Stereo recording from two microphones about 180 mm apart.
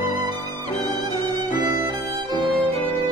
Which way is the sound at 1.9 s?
25° right (ahead or behind).